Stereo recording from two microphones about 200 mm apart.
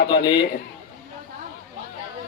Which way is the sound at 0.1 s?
25° left (ahead or behind).